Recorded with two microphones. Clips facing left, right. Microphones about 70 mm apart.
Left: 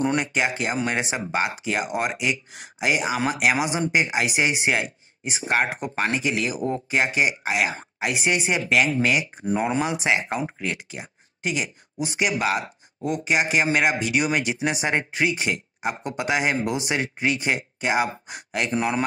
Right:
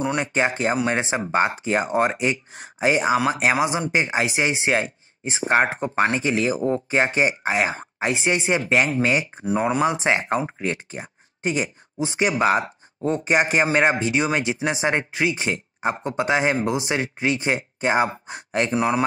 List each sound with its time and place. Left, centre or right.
0.2 s speech: right
9.4 s speech: centre
9.8 s speech: right
10.1 s speech: right